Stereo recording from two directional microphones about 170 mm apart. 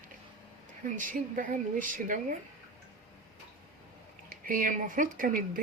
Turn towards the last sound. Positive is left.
turn(degrees=-55)  # may be behind; listen again after turning